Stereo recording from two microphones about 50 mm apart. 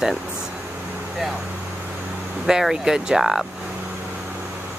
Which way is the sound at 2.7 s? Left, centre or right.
Centre.